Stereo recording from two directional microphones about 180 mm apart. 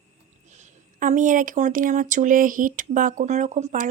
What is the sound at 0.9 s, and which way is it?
Speech, 45° right (ahead or behind).